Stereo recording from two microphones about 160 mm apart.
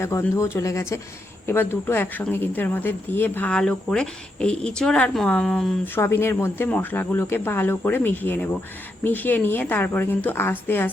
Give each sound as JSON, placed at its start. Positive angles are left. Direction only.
{"t": 0.0, "sound": "speech", "side_deg": 15}
{"t": 5.9, "sound": "speech", "side_deg": 15}